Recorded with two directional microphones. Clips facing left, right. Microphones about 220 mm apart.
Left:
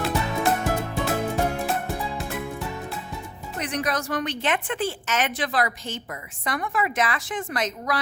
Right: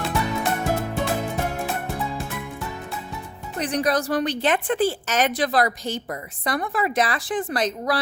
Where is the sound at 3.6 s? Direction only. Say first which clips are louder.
Right 5 dB; 35° right (ahead or behind).